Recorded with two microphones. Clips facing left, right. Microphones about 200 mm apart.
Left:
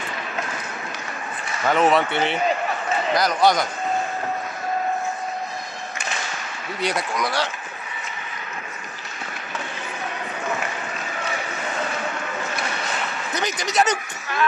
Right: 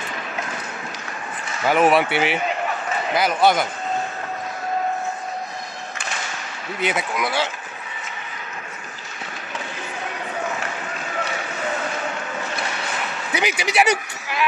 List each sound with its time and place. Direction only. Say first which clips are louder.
1.7 s speech: right 2 dB; 5° right (ahead or behind)
6.8 s speech: right 1 dB; 5° right (ahead or behind)
13.3 s speech: right 4 dB; 10° right (ahead or behind)